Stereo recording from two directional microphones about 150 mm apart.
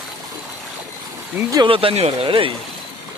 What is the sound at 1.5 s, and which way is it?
Speech, 30° right (ahead or behind).